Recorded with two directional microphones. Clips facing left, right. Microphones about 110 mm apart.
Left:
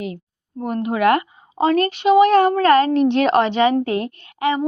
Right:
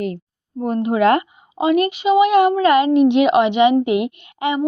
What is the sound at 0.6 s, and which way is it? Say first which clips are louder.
Speech: right 2 dB; 25° right (ahead or behind).